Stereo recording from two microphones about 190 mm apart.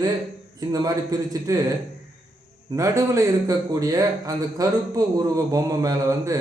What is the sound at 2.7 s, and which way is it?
A man's voice, 15° right (ahead or behind).